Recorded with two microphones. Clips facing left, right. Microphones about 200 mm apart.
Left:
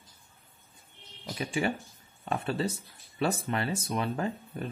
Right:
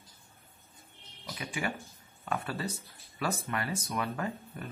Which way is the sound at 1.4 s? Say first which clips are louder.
Left 6 dB; 30° left (ahead or behind).